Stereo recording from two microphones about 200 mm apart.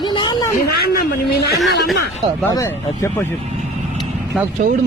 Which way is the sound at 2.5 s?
15° left (ahead or behind).